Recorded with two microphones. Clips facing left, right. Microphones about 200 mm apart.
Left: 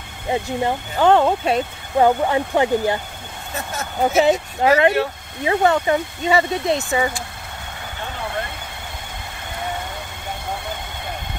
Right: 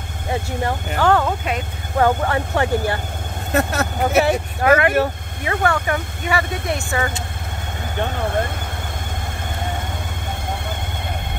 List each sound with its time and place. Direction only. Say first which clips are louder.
0.3 s speech: left 2 dB; 15° left (ahead or behind)
2.0 s speech: left 2 dB; 15° left (ahead or behind)
3.5 s speech: right 6 dB; 70° right (ahead or behind)
4.2 s speech: left 2 dB; 25° left (ahead or behind)